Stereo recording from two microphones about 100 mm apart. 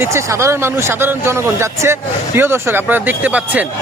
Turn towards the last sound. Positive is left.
turn(degrees=-15)  # may be behind; listen again after turning